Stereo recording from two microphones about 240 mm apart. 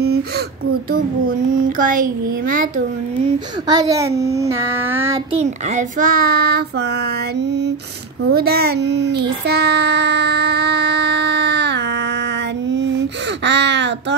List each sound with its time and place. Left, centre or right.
1.8 s child singing: right
3.6 s a child's voice: centre
5.3 s child singing: right
8.3 s speech: right
13.5 s a sound: right